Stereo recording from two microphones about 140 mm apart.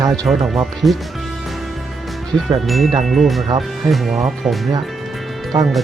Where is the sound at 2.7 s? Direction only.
Centre (ahead or behind).